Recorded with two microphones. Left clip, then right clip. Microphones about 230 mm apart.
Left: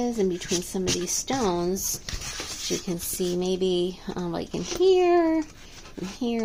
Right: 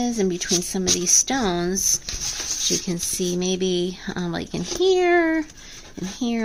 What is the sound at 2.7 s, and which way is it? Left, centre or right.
Speech, right.